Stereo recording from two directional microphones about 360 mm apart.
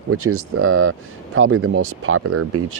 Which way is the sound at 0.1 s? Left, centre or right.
Right.